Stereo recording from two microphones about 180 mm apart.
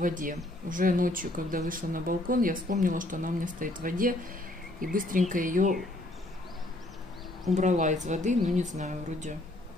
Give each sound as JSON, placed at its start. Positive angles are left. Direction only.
{"t": 0.0, "sound": "speech", "side_deg": -45}
{"t": 7.5, "sound": "a woman's voice", "side_deg": -40}